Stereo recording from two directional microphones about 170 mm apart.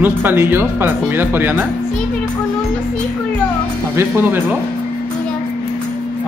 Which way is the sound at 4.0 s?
10° right (ahead or behind).